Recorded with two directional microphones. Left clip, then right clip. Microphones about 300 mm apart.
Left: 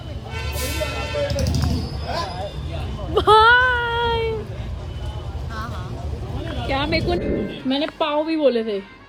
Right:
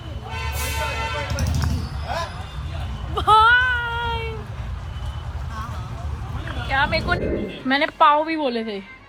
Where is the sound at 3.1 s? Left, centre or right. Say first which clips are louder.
Left 2 dB; centre.